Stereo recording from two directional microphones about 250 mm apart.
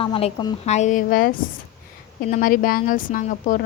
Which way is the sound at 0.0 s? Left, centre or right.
Left.